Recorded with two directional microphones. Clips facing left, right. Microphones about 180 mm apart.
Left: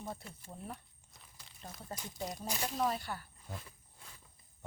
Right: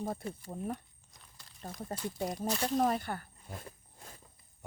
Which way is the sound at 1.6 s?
50° right (ahead or behind).